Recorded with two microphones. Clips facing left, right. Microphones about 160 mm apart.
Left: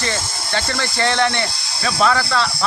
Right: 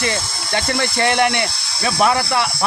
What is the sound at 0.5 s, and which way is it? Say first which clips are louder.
Speech: right 3 dB; 15° right (ahead or behind).